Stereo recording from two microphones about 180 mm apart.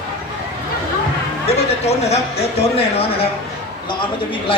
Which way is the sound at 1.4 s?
35° left (ahead or behind).